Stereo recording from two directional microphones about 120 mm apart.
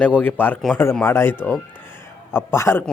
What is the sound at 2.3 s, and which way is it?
Speech, 20° left (ahead or behind).